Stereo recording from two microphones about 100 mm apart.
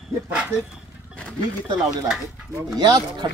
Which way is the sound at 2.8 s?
45° right (ahead or behind).